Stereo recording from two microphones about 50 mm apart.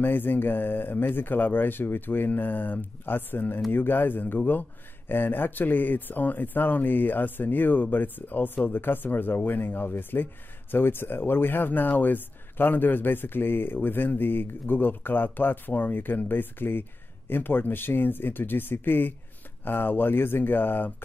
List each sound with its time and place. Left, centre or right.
0.0 s speech: left